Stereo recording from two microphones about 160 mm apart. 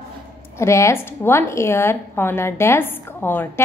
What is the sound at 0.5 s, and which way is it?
A woman's voice, 20° left (ahead or behind).